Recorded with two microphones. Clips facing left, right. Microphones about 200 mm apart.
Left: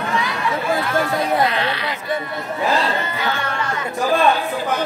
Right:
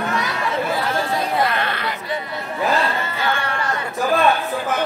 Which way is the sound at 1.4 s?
50° right (ahead or behind).